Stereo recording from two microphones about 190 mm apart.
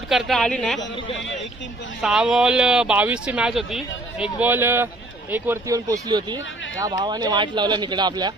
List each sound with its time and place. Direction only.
0.1 s speech: centre (ahead or behind)
2.0 s speech: 5° right (ahead or behind); by 8.3 s 20° right (ahead or behind)